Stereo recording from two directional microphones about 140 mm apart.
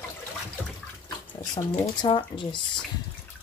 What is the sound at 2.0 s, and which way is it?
Speech, 35° left (ahead or behind).